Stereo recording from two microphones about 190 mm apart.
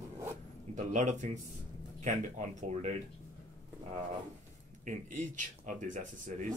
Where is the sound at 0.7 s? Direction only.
40° right (ahead or behind).